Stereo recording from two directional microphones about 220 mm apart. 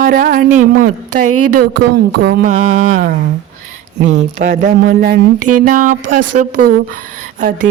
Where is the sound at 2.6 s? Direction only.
65° right (ahead or behind).